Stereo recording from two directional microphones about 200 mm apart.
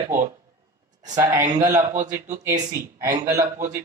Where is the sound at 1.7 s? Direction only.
35° right (ahead or behind).